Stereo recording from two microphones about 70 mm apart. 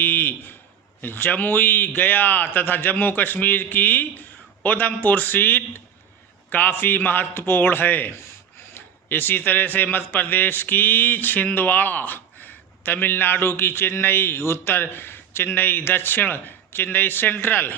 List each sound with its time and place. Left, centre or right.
0.0 s a man's voice: left